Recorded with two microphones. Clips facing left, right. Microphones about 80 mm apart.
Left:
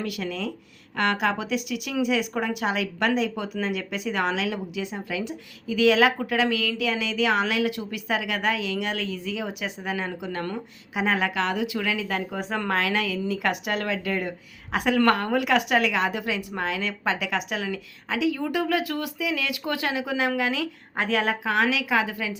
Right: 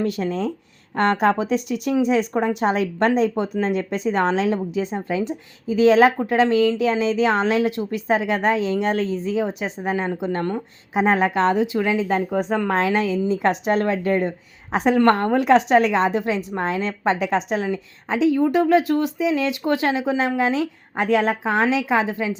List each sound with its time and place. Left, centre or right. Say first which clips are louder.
0.0 s a woman's voice: right 7 dB; right